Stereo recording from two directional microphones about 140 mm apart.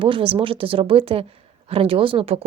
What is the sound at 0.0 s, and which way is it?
Speech, 40° right (ahead or behind).